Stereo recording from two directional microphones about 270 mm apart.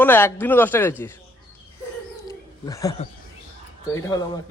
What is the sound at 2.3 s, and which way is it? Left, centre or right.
Wild animals, centre.